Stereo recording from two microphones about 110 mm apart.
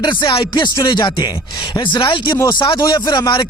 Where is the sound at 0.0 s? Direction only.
45° left (ahead or behind).